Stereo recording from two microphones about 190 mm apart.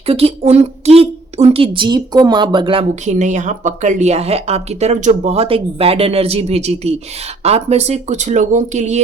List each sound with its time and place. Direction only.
0.0 s speech: 30° right (ahead or behind)